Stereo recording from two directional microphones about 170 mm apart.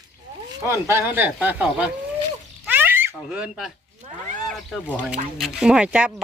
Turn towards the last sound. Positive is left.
turn(degrees=-5)  # may be behind; listen again after turning